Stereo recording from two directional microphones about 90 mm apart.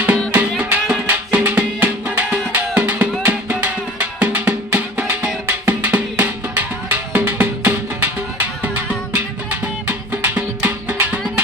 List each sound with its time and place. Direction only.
0.0 s music: 20° right (ahead or behind)